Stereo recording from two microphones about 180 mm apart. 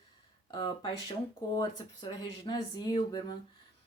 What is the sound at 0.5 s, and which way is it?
Speech, 25° left (ahead or behind).